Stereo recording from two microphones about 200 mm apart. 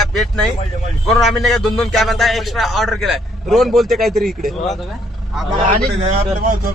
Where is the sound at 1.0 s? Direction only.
Centre (ahead or behind).